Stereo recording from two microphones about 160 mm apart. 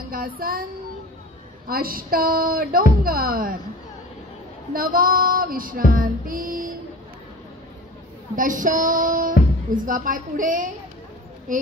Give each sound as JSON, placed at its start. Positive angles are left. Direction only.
{"t": 0.1, "sound": "speech", "side_deg": -65}
{"t": 1.7, "sound": "female singing", "side_deg": -65}
{"t": 4.7, "sound": "female singing", "side_deg": -60}
{"t": 8.4, "sound": "female singing", "side_deg": -55}